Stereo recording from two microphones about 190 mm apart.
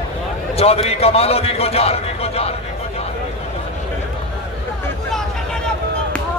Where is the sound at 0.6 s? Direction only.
30° left (ahead or behind).